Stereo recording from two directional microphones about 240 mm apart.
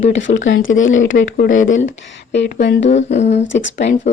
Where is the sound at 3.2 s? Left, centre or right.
Left.